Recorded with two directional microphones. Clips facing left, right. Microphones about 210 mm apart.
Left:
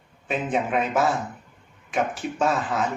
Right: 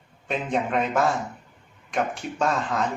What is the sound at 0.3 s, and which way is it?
A man's voice, 5° left (ahead or behind).